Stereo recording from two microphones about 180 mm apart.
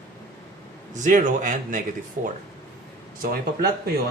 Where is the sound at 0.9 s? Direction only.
45° right (ahead or behind).